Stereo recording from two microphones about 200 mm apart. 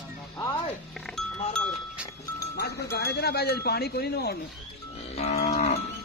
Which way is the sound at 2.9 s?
55° left (ahead or behind).